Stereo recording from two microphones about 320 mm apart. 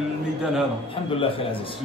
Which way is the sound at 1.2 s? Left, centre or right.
Centre.